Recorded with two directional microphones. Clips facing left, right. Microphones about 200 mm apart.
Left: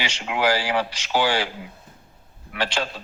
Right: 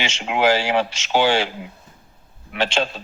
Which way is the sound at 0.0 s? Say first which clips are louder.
Right 4 dB; 25° right (ahead or behind).